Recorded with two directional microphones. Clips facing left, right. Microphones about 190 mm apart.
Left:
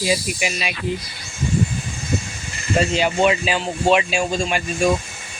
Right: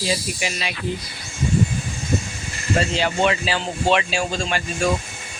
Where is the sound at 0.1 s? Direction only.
15° left (ahead or behind).